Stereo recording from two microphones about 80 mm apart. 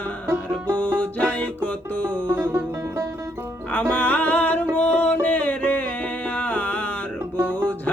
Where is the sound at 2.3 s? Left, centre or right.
Right.